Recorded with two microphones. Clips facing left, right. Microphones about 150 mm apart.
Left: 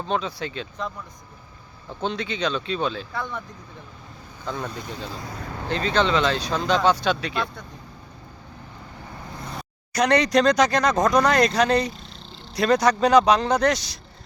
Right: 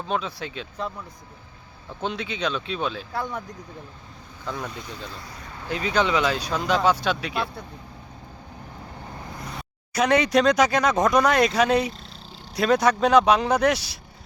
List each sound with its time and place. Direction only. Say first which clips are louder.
0.1 s speech: left 1 dB; 5° right (ahead or behind)
2.0 s speech: left 2 dB; 5° right (ahead or behind)
4.4 s speech: left 2 dB; centre (ahead or behind)
9.9 s speech: left 1 dB; 5° right (ahead or behind)